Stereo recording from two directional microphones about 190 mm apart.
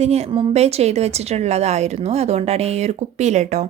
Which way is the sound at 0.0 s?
35° right (ahead or behind).